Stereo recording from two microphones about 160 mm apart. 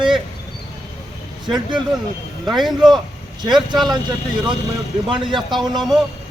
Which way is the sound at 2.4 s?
Centre (ahead or behind).